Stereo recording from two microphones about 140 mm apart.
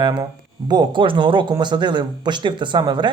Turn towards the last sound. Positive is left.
turn(degrees=-30)  # may be behind; listen again after turning